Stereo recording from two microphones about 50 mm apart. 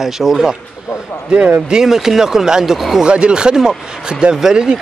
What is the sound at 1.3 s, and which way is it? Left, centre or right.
Speech, right.